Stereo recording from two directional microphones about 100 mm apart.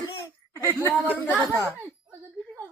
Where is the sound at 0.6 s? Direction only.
25° left (ahead or behind).